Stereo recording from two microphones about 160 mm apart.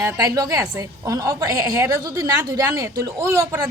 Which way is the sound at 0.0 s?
25° right (ahead or behind).